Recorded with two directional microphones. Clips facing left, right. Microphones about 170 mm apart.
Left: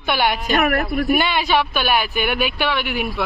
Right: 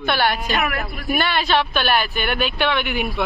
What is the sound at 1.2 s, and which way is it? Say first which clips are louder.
Speech: left 1 dB; 15° left (ahead or behind).